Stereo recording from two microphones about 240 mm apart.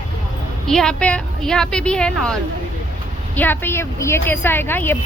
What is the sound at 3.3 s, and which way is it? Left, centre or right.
A woman's voice, centre.